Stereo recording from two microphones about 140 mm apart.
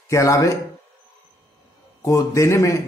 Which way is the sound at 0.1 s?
20° left (ahead or behind).